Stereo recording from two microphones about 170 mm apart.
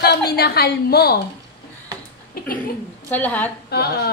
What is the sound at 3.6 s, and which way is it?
Speech, 70° left (ahead or behind).